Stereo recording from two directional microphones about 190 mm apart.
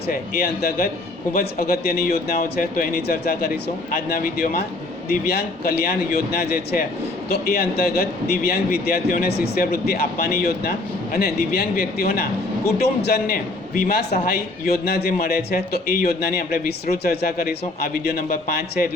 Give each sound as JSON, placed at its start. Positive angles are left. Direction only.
{"t": 0.1, "sound": "a man's voice", "side_deg": 50}
{"t": 7.3, "sound": "a man's voice", "side_deg": 55}